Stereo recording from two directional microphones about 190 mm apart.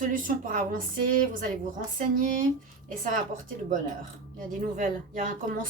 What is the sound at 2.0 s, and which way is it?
Speech, 45° right (ahead or behind).